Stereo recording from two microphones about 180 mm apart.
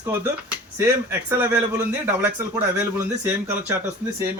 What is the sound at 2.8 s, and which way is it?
Speech, 10° right (ahead or behind).